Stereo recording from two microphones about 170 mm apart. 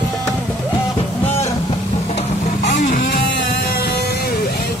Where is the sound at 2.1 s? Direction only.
40° left (ahead or behind).